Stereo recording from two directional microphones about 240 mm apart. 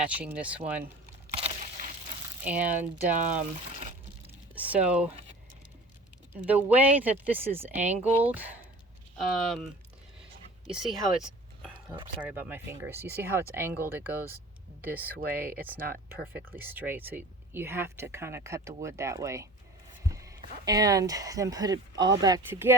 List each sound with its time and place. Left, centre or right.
0.0 s speech: centre
1.4 s a sound: right
2.4 s speech: centre
4.5 s speech: centre
6.3 s speech: centre
10.8 s speech: centre
15.9 s speech: right
16.6 s speech: centre